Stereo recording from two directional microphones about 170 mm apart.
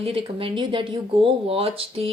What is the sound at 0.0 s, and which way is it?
Speech, 35° right (ahead or behind).